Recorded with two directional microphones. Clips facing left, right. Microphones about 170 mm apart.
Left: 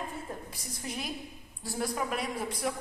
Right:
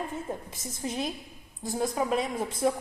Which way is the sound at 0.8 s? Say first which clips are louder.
Right 5 dB; 25° right (ahead or behind).